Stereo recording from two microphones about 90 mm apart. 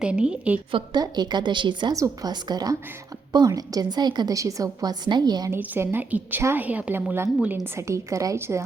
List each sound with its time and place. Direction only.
0.0 s a woman's voice: 10° right (ahead or behind)
0.9 s a woman's voice: 50° right (ahead or behind)
1.9 s a woman's voice: 45° right (ahead or behind)
4.4 s a woman's voice: 40° right (ahead or behind)
5.5 s a woman's voice: 25° right (ahead or behind)